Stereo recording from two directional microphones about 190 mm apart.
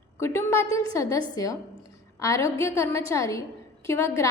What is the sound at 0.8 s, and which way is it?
A woman's voice, 15° left (ahead or behind).